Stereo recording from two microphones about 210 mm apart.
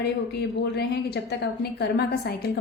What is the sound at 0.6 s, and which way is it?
A woman's voice, 50° left (ahead or behind).